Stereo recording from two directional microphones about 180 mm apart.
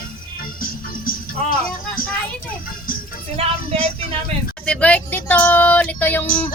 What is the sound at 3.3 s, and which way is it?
Speech, 35° right (ahead or behind).